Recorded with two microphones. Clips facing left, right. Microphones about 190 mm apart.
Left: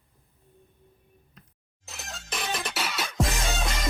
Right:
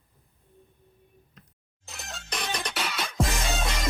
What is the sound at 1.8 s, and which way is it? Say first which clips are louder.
Music: even; centre (ahead or behind).